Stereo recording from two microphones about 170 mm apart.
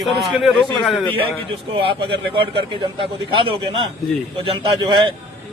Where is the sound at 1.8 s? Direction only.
30° right (ahead or behind).